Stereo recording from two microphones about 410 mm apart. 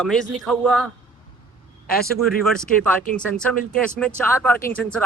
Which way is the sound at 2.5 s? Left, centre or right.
Centre.